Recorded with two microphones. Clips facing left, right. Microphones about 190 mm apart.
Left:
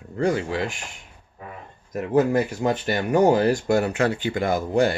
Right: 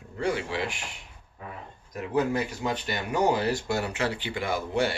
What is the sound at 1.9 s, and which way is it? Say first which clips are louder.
Speech: left 6 dB; 50° left (ahead or behind).